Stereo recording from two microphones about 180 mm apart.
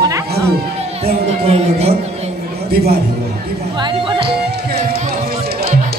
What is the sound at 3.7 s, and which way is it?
Music, 25° right (ahead or behind).